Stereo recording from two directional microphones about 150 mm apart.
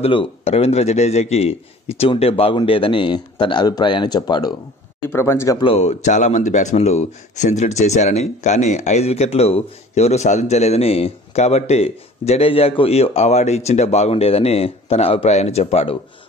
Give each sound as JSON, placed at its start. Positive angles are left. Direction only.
{"t": 0.0, "sound": "a man's voice", "side_deg": 40}
{"t": 5.1, "sound": "speech", "side_deg": 15}
{"t": 5.6, "sound": "speech", "side_deg": 45}